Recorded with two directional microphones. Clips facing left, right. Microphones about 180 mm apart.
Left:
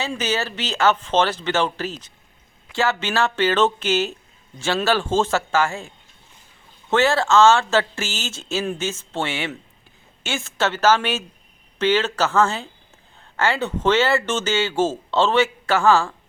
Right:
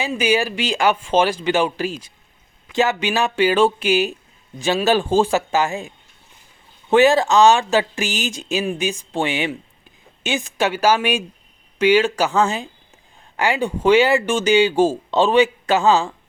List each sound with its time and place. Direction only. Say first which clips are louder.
0.0 s speech: right 5 dB; 10° right (ahead or behind)
6.9 s speech: right 4 dB; 15° right (ahead or behind)